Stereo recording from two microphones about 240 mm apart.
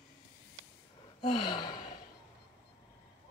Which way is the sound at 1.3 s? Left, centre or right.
Centre.